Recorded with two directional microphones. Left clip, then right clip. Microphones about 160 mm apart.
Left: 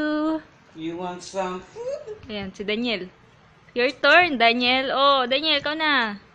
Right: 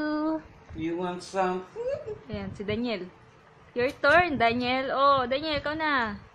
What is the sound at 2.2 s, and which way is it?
A woman's voice, 10° left (ahead or behind).